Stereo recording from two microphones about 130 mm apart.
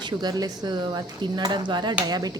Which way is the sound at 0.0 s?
35° right (ahead or behind).